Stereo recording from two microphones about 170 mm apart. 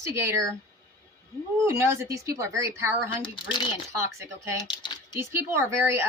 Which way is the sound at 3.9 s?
15° right (ahead or behind).